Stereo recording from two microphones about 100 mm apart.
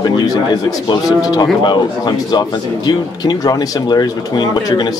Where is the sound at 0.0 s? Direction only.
40° left (ahead or behind).